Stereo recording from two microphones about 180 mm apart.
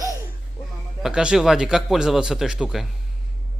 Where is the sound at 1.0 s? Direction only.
5° right (ahead or behind).